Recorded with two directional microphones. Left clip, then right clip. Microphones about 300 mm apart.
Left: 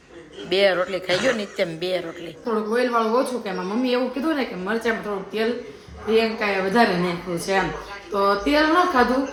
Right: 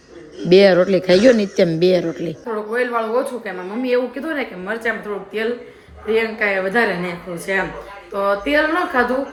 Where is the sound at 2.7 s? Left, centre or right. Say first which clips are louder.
Right 2 dB; centre.